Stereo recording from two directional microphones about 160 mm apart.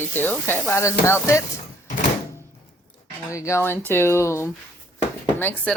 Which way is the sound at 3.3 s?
20° left (ahead or behind).